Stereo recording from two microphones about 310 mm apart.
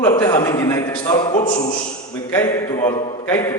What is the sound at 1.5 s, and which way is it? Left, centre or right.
Speech, left.